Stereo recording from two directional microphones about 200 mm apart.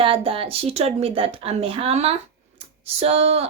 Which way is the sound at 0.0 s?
25° right (ahead or behind).